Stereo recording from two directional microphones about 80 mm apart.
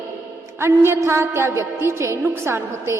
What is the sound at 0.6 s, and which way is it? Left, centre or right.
A woman's voice, right.